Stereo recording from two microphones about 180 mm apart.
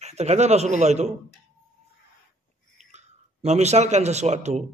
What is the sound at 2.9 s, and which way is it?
Speech, 40° right (ahead or behind).